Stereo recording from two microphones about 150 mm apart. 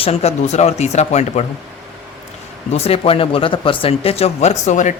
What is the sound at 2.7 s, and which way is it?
Speech, 40° left (ahead or behind).